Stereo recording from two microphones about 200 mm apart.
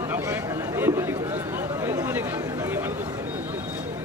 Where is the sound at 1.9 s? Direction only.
10° right (ahead or behind).